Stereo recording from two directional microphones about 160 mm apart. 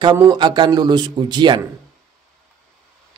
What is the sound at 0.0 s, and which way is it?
A man's voice, 25° right (ahead or behind).